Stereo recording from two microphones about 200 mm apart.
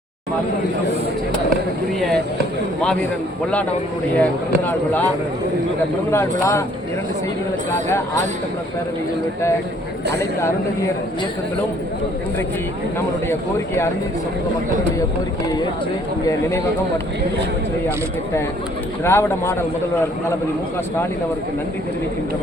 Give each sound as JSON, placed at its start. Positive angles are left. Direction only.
{"t": 2.0, "sound": "speech", "side_deg": 0}
{"t": 4.2, "sound": "speech", "side_deg": 10}
{"t": 6.1, "sound": "speech", "side_deg": 15}
{"t": 19.0, "sound": "speech", "side_deg": 10}